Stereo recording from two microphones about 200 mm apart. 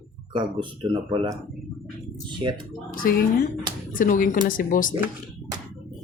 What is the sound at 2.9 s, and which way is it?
A child's voice, 45° left (ahead or behind).